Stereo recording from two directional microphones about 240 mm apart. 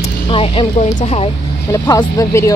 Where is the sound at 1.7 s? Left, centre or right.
Centre.